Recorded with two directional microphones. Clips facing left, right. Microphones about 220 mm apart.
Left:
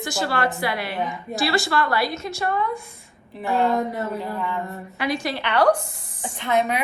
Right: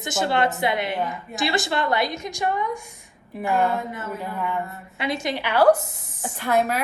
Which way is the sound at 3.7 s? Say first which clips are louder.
Left 6 dB; 40° left (ahead or behind).